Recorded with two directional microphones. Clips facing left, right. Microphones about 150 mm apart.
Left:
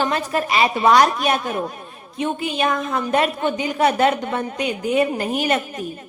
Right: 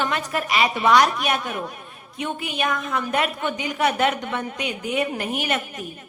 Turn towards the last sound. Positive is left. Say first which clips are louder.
# left 5 dB
turn(degrees=35)  # may be behind; listen again after turning